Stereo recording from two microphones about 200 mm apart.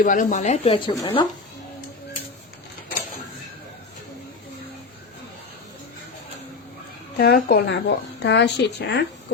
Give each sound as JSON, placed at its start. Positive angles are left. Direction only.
{"t": 0.0, "sound": "speech", "side_deg": 40}
{"t": 7.2, "sound": "speech", "side_deg": 50}